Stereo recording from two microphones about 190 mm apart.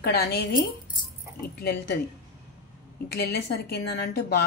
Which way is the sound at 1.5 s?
60° left (ahead or behind).